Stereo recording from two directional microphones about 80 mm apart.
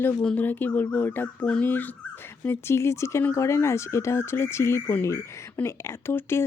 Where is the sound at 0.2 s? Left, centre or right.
Centre.